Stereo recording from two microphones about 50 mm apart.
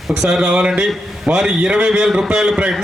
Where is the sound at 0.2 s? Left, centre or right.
Centre.